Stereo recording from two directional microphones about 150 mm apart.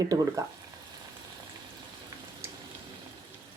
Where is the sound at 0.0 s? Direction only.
25° right (ahead or behind).